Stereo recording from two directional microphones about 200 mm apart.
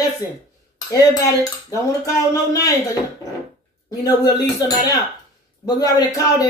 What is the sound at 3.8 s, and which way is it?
A man's voice, 20° left (ahead or behind).